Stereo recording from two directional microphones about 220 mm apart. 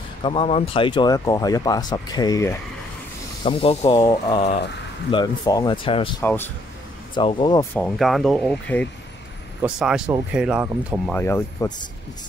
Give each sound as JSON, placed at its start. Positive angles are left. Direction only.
{"t": 0.2, "sound": "speech", "side_deg": 25}
{"t": 6.2, "sound": "speech", "side_deg": 10}
{"t": 7.2, "sound": "speech", "side_deg": 20}
{"t": 7.7, "sound": "speech", "side_deg": 0}
{"t": 11.1, "sound": "speech", "side_deg": 10}